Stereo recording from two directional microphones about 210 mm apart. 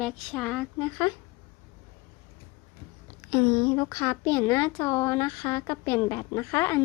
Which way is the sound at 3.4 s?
30° left (ahead or behind).